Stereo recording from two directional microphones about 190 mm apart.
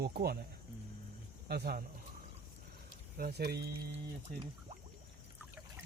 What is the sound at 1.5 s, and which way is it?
Speech, 55° right (ahead or behind).